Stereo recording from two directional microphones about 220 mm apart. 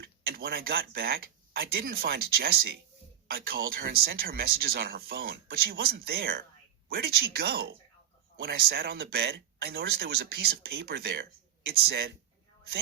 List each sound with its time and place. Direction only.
0.0 s speech: 45° right (ahead or behind)